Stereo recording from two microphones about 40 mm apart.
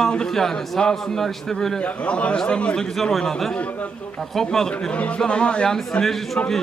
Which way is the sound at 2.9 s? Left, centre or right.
Centre.